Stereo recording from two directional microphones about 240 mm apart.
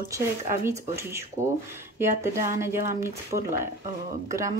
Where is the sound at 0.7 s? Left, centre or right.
Centre.